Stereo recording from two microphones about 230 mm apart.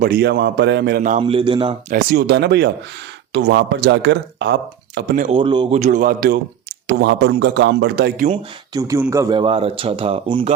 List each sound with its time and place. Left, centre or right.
0.0 s a man's voice: right
1.2 s speech: right
1.9 s a man's voice: right
4.9 s speech: right
5.3 s a man's voice: right
8.7 s speech: centre